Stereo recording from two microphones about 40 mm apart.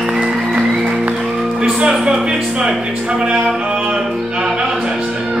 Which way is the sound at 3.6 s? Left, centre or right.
Right.